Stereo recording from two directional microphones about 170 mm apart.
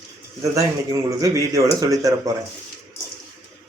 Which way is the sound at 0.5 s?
20° right (ahead or behind).